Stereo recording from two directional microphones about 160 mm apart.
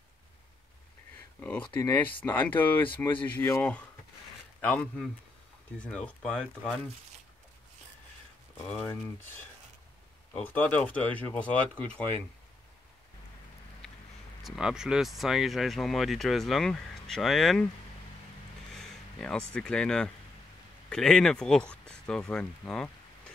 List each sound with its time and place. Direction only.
1.4 s speech: 15° left (ahead or behind)
8.6 s speech: 10° left (ahead or behind)
10.3 s speech: 10° left (ahead or behind)
13.8 s a sound: 5° left (ahead or behind)
14.4 s speech: centre (ahead or behind)
19.1 s speech: 5° left (ahead or behind)